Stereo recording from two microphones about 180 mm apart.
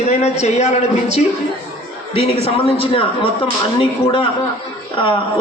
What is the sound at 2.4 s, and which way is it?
A man's voice, 30° left (ahead or behind).